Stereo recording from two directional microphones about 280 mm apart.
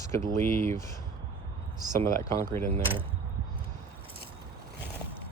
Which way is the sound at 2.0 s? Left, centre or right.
Centre.